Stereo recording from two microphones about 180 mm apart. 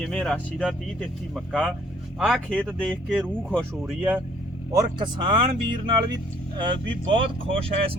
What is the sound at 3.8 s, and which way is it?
Speech, 10° right (ahead or behind).